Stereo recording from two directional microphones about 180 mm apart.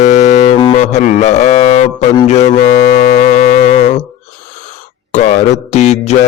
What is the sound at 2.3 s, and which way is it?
Music, 40° left (ahead or behind).